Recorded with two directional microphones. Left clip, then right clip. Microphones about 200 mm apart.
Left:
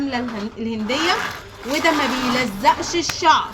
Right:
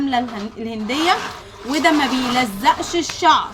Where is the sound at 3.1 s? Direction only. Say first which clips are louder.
Right 1 dB; 45° right (ahead or behind).